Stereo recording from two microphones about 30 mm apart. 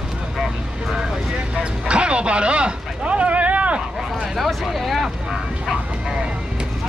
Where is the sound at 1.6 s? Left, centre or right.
Right.